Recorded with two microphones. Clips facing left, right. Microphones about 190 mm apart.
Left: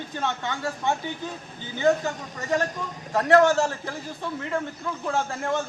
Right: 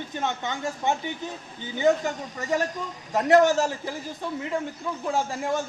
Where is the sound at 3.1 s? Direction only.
15° right (ahead or behind).